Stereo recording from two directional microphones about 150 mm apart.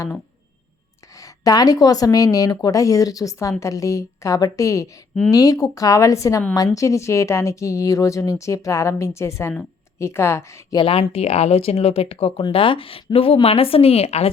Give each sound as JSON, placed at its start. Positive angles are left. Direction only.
{"t": 1.2, "sound": "speech", "side_deg": 25}
{"t": 10.8, "sound": "speech", "side_deg": 35}